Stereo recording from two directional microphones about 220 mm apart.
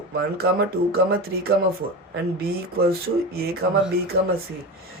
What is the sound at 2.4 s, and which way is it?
Speech, 45° right (ahead or behind).